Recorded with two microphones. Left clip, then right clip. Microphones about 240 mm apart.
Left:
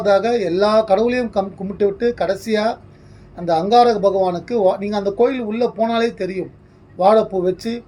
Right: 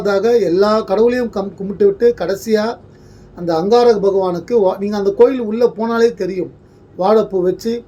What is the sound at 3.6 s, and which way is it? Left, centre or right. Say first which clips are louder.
A man's voice: right 2 dB; centre.